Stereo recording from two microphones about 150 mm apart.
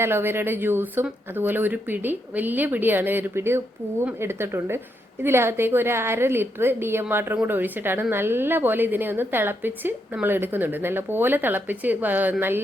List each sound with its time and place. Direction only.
0.0 s a woman's voice: 15° right (ahead or behind)